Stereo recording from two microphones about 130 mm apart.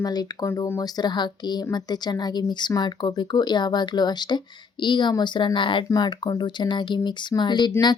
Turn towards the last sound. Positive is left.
turn(degrees=35)  # may be behind; listen again after turning